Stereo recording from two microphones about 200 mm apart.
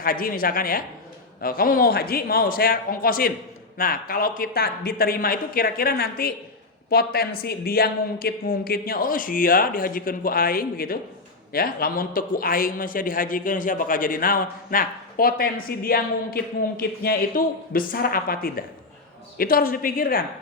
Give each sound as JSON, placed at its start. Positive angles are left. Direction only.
{"t": 0.0, "sound": "a man's voice", "side_deg": 45}